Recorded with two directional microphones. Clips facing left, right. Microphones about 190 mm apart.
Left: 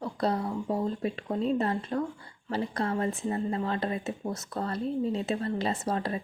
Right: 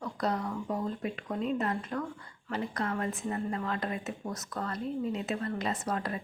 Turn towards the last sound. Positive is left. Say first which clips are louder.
# left 3 dB
turn(degrees=30)  # may be behind; listen again after turning